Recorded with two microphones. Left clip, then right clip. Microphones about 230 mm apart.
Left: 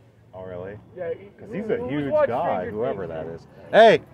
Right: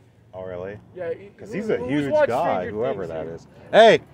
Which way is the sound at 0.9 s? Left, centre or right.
Right.